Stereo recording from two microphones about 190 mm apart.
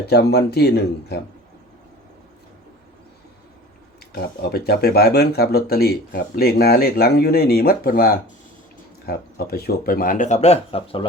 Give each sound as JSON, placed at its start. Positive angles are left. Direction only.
{"t": 0.0, "sound": "speech", "side_deg": 60}
{"t": 4.1, "sound": "speech", "side_deg": 55}